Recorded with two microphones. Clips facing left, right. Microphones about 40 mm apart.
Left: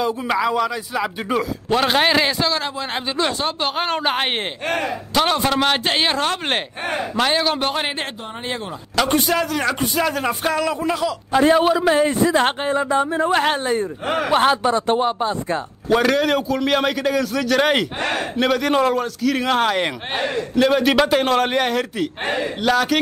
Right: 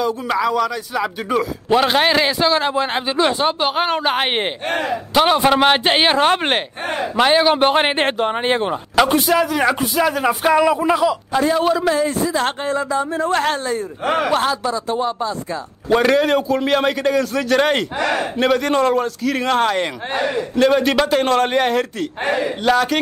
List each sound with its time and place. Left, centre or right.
0.0 s a man's voice: centre
2.4 s a man's voice: centre; by 8.7 s right
9.0 s a man's voice: centre
10.5 s speech: centre
11.6 s a man's voice: centre
11.9 s speech: left
13.3 s a man's voice: centre
14.5 s speech: left
15.9 s a man's voice: centre